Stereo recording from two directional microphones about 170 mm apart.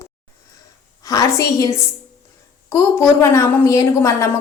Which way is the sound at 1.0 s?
20° left (ahead or behind).